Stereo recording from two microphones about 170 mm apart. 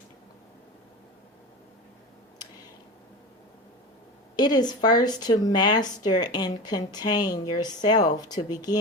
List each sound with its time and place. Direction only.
4.4 s speech: 25° left (ahead or behind)